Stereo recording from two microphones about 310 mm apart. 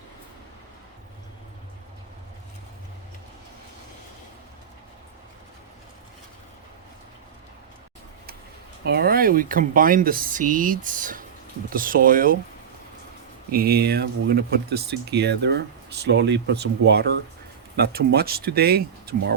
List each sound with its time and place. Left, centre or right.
8.8 s speech: right
13.5 s speech: right